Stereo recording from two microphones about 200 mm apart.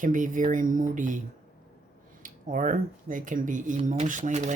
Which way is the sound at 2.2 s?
40° right (ahead or behind).